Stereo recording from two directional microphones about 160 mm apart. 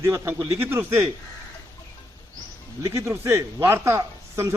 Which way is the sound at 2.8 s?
15° right (ahead or behind).